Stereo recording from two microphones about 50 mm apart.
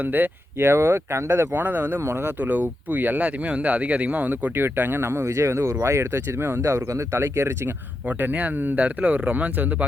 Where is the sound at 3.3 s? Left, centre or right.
Right.